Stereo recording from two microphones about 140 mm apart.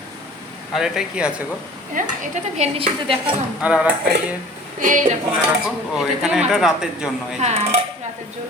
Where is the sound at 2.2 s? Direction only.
50° right (ahead or behind).